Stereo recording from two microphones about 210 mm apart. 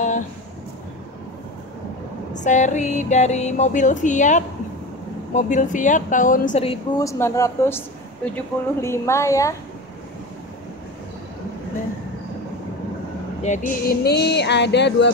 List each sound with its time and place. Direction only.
2.3 s music: 35° left (ahead or behind)
7.0 s a woman's voice: 15° left (ahead or behind)
13.4 s a sound: 35° left (ahead or behind); by 15.0 s 55° left (ahead or behind)